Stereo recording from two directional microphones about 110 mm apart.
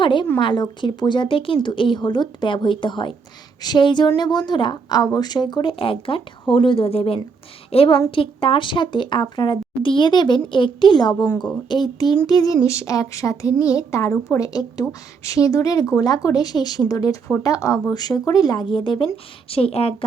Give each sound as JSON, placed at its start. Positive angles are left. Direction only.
{"t": 0.0, "sound": "a woman's voice", "side_deg": 45}
{"t": 5.8, "sound": "a woman's voice", "side_deg": 55}
{"t": 18.6, "sound": "speech", "side_deg": 50}
{"t": 19.1, "sound": "a woman's voice", "side_deg": 60}